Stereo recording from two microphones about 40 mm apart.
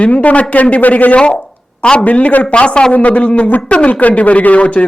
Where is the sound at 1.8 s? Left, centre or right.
Left.